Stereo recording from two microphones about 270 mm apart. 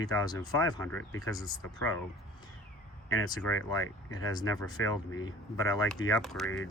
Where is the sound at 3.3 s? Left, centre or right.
Centre.